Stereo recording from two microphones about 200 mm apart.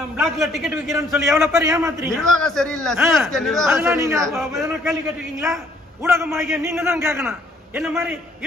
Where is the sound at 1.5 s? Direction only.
15° right (ahead or behind).